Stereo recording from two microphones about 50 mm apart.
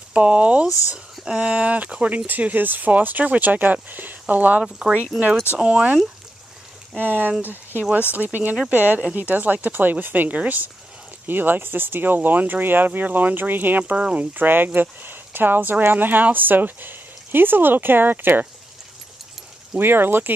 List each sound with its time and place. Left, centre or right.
0.1 s speech: right
4.6 s speech: centre
5.1 s speech: centre
5.6 s speech: right
7.0 s speech: right
19.8 s speech: right